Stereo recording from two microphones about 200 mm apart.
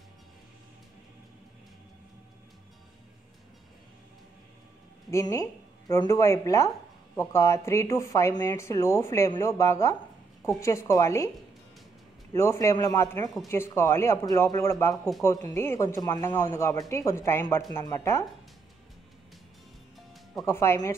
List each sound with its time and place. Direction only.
5.1 s speech: 20° left (ahead or behind)
12.4 s speech: 15° left (ahead or behind)
20.4 s speech: 10° left (ahead or behind)